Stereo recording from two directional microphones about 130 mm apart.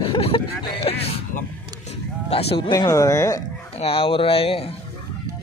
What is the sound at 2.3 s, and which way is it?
Speech, 45° left (ahead or behind).